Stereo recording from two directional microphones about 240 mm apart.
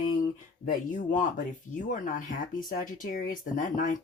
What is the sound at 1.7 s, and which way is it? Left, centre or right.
Speech, left.